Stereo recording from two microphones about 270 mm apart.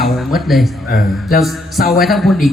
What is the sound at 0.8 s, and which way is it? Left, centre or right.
Speech, left.